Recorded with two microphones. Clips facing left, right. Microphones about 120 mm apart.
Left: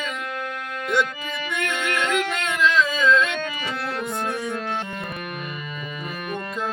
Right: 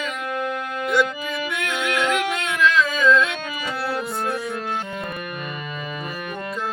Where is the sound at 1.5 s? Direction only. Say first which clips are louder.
Left 1 dB; 10° right (ahead or behind).